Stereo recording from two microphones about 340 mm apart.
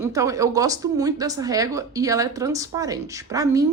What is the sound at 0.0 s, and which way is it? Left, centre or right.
Speech, centre.